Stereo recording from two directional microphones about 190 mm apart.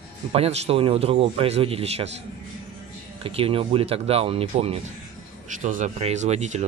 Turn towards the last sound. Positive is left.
turn(degrees=-35)  # may be behind; listen again after turning